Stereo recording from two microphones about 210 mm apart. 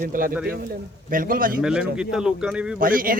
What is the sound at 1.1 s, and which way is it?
Speech, 40° right (ahead or behind).